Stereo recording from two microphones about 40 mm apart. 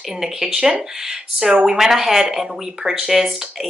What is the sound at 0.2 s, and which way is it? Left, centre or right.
Speech, centre.